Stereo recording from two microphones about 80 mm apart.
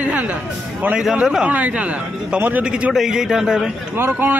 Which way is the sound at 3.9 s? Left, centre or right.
Right.